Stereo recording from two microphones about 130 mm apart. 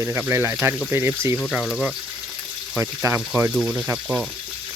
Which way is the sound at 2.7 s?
20° right (ahead or behind).